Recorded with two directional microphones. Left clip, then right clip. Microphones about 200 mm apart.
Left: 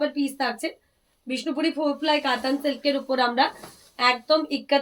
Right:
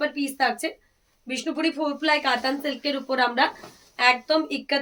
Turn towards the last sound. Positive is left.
turn(degrees=-20)  # may be behind; listen again after turning